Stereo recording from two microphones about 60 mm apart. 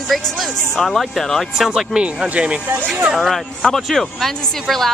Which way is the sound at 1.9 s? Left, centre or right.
Centre.